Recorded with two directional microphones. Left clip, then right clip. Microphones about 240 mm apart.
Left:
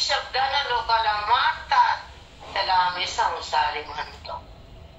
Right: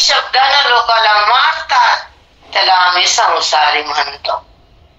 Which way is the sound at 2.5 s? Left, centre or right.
Right.